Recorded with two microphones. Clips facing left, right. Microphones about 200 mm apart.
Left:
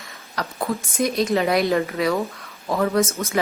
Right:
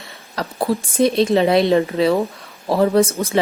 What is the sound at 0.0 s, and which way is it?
Speech, 30° right (ahead or behind).